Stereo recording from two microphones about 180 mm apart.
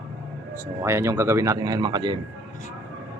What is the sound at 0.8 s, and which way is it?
Speech, 15° right (ahead or behind).